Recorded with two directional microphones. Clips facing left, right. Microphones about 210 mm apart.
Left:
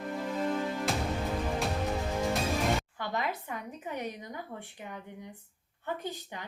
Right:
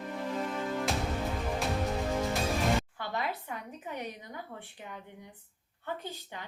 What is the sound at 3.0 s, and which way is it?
Speech, 45° left (ahead or behind).